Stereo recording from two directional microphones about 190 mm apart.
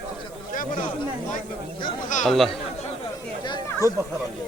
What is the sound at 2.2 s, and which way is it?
Speech, centre (ahead or behind).